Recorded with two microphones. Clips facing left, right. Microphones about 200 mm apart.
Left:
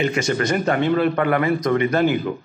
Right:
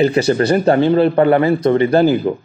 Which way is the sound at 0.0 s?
35° right (ahead or behind).